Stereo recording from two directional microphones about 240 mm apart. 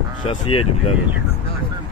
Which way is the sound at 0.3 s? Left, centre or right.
Left.